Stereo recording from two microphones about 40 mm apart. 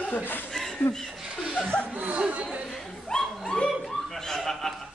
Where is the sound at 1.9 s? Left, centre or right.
Right.